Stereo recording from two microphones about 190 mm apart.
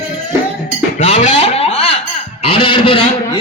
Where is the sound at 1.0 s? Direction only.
40° left (ahead or behind).